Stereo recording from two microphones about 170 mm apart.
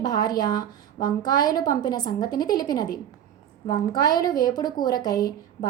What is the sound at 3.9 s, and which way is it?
A woman's voice, 25° left (ahead or behind).